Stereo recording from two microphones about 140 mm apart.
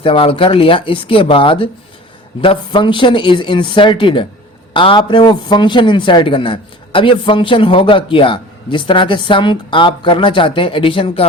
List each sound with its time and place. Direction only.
0.0 s a man's voice: 40° left (ahead or behind)